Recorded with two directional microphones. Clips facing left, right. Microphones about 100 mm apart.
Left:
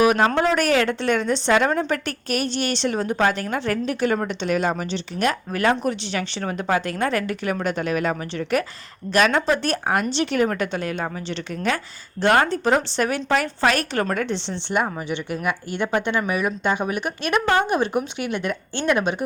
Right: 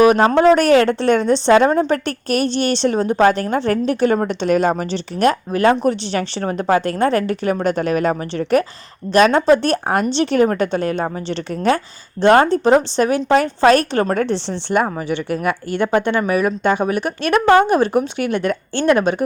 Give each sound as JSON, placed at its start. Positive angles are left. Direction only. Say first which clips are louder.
{"t": 0.0, "sound": "a woman's voice", "louder": "right 6 dB", "side_deg": -35}
{"t": 16.8, "sound": "a woman's voice", "louder": "right 6 dB", "side_deg": -40}